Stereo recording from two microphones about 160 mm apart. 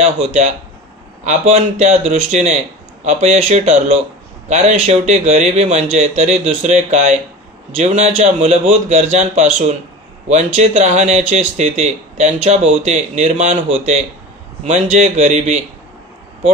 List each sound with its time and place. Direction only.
0.0 s a man's voice: 40° right (ahead or behind)